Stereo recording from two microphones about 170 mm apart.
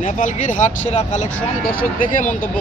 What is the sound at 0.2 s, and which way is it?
Speech, 50° left (ahead or behind).